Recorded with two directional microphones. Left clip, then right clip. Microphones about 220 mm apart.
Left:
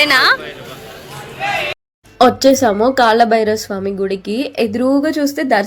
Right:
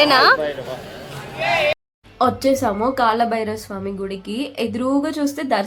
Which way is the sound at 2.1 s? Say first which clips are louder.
Left 7 dB; 25° left (ahead or behind).